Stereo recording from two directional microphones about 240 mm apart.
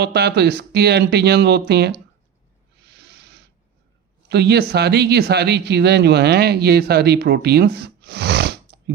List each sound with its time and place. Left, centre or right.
0.0 s speech: right
2.8 s a sound: right
4.3 s speech: right